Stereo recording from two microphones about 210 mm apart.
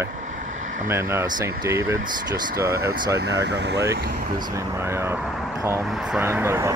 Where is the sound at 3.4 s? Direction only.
55° right (ahead or behind).